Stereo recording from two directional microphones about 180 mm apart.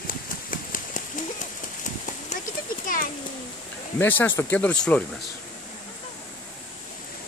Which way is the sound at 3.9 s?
10° left (ahead or behind).